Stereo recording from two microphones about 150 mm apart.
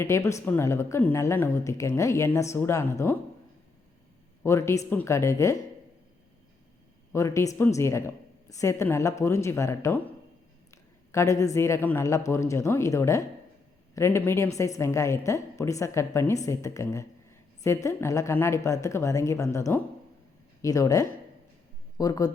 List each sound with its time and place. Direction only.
0.0 s speech: 20° left (ahead or behind)
4.4 s speech: 20° left (ahead or behind)
7.1 s speech: 20° left (ahead or behind)
11.1 s speech: 20° left (ahead or behind)